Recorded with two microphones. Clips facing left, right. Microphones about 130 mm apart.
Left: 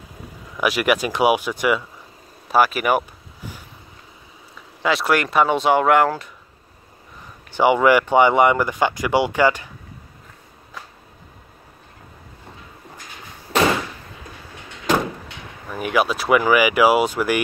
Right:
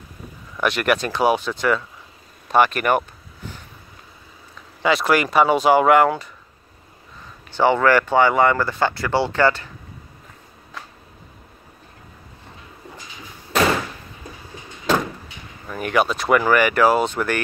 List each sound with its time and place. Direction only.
0.6 s speech: 5° left (ahead or behind)
4.8 s speech: centre (ahead or behind)
7.5 s speech: 15° left (ahead or behind)
15.7 s speech: 5° left (ahead or behind)